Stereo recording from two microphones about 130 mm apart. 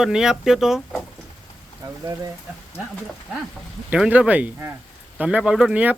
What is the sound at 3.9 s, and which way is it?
Speech, 10° right (ahead or behind).